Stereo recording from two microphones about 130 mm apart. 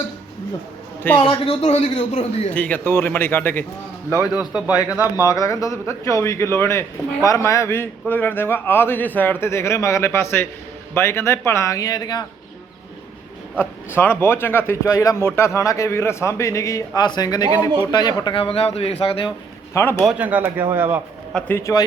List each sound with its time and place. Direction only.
1.0 s speech: 15° left (ahead or behind)
1.5 s a man's voice: 55° left (ahead or behind)
2.5 s speech: 10° left (ahead or behind)
4.3 s speech: 10° right (ahead or behind)
5.1 s a man's voice: 25° left (ahead or behind)
13.6 s a man's voice: 15° left (ahead or behind); by 18.3 s 30° left (ahead or behind)
18.3 s a man's voice: 45° left (ahead or behind)
19.7 s speech: 15° left (ahead or behind)
20.1 s speech: 10° right (ahead or behind)
21.3 s a man's voice: 15° left (ahead or behind)